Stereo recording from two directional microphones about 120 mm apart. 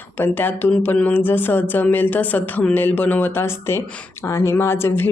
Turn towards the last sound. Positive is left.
turn(degrees=20)  # may be behind; listen again after turning